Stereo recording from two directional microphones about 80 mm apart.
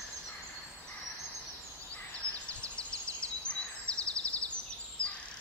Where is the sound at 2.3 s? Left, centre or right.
Centre.